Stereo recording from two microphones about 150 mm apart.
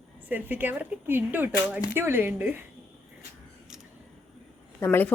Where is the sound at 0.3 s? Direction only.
10° right (ahead or behind).